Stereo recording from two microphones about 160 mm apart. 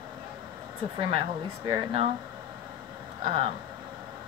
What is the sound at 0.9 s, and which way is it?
A woman's voice, 35° right (ahead or behind).